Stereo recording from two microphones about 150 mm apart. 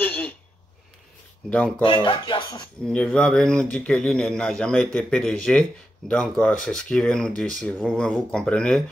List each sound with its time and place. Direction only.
0.0 s speech: 10° left (ahead or behind)
1.8 s speech: 35° left (ahead or behind)
2.8 s speech: 5° left (ahead or behind)
8.3 s speech: 5° left (ahead or behind)